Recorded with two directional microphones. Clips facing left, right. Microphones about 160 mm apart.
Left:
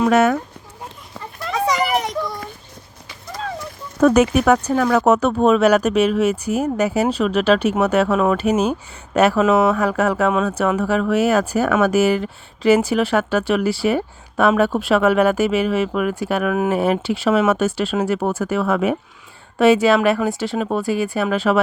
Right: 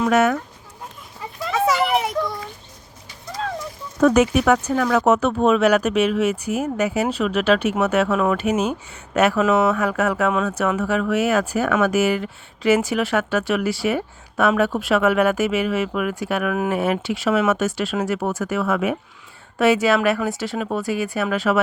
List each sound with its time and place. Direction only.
0.0 s speech: 30° left (ahead or behind)
1.5 s children playing: centre (ahead or behind)
3.3 s a sound: centre (ahead or behind)
4.0 s speech: 40° left (ahead or behind)